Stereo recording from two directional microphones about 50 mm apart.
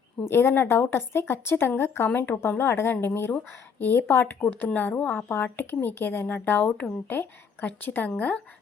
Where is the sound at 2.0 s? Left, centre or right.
Left.